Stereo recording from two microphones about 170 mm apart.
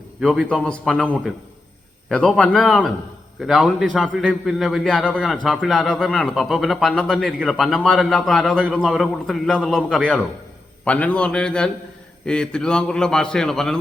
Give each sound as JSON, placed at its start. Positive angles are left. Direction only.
{"t": 0.2, "sound": "a man's voice", "side_deg": 0}
{"t": 2.0, "sound": "a man's voice", "side_deg": 5}